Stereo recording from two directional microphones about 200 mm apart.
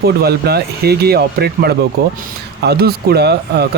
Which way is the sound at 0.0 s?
50° right (ahead or behind).